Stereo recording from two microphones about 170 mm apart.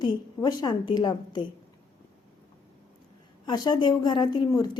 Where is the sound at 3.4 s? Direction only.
25° left (ahead or behind).